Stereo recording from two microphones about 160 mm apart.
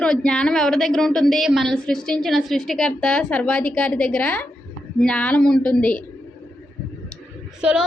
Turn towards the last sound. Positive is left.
turn(degrees=-5)  # may be behind; listen again after turning